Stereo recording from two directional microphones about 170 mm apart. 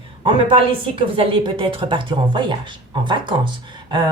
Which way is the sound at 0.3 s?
30° right (ahead or behind).